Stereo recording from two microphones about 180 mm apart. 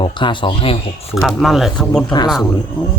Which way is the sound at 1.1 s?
Centre (ahead or behind).